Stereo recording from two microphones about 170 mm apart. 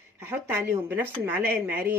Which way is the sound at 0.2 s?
15° right (ahead or behind).